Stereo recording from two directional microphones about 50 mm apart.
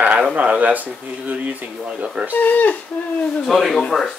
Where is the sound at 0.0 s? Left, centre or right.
Right.